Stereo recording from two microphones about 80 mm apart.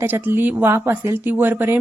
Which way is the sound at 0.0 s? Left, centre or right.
Right.